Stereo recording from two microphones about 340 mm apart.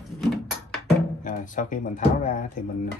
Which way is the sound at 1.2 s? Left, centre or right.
Left.